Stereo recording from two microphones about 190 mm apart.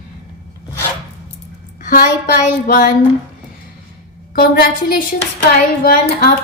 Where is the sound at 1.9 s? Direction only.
50° left (ahead or behind).